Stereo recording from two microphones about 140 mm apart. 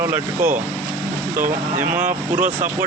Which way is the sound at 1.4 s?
75° right (ahead or behind).